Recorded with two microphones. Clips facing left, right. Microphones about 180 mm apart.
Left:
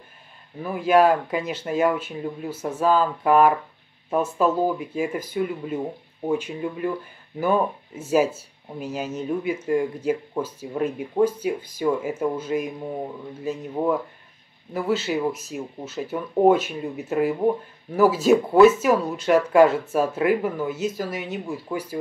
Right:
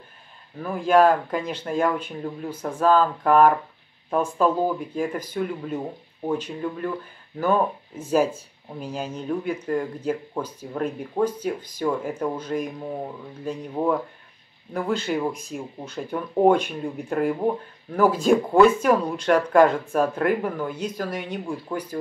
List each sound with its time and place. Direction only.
0.6 s speech: 10° left (ahead or behind)